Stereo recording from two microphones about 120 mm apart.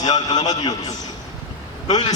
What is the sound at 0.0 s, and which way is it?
Speech, 35° left (ahead or behind).